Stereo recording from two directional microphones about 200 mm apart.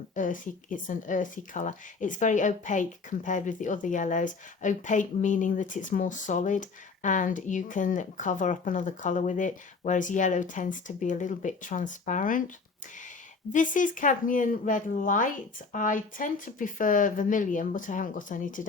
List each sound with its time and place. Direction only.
0.1 s speech: 40° left (ahead or behind)
13.5 s speech: 40° left (ahead or behind)